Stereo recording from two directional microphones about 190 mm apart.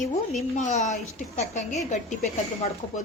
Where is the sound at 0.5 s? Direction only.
40° left (ahead or behind).